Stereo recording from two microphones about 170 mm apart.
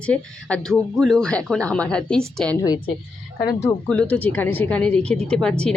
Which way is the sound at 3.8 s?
5° left (ahead or behind).